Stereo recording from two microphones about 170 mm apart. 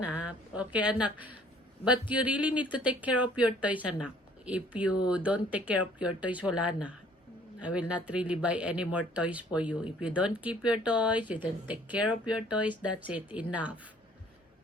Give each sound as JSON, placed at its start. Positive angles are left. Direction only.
{"t": 0.0, "sound": "a woman's voice", "side_deg": -5}